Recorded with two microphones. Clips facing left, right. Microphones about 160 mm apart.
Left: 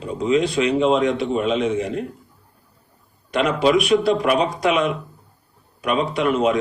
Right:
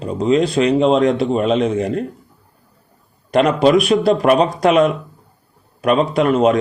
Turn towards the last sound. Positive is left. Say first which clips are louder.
# right 5 dB
turn(degrees=-40)  # may be behind; listen again after turning